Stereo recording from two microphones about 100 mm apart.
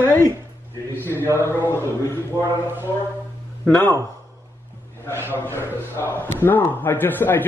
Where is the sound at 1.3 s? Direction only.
30° right (ahead or behind).